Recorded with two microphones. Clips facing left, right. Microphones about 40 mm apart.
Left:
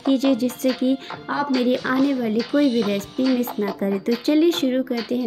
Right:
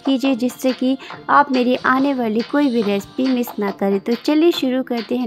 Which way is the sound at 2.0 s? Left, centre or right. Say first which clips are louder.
Right 3 dB; right.